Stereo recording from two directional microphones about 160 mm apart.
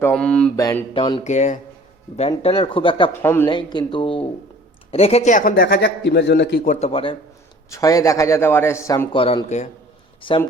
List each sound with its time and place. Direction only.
0.0 s mantra: 5° left (ahead or behind)
0.5 s a man's voice: 20° left (ahead or behind)
0.9 s speech: 30° left (ahead or behind)
1.2 s speech: 50° left (ahead or behind)
2.4 s speech: 35° left (ahead or behind)
3.2 s mantra: 15° left (ahead or behind)
3.4 s a man's voice: 30° left (ahead or behind); by 6.7 s 90° left
6.7 s speech: 40° left (ahead or behind)
7.7 s a man's voice: 20° left (ahead or behind)
9.1 s speech: 35° left (ahead or behind)